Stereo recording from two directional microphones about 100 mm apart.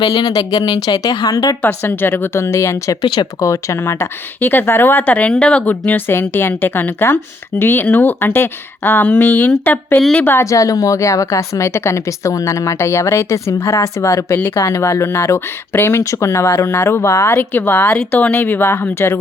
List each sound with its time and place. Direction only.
0.0 s a woman's voice: 55° left (ahead or behind)
1.8 s speech: 20° left (ahead or behind)
10.0 s a woman's voice: 10° left (ahead or behind)
10.2 s speech: 30° left (ahead or behind)